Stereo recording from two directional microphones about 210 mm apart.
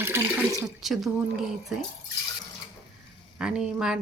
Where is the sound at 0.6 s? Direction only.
Centre (ahead or behind).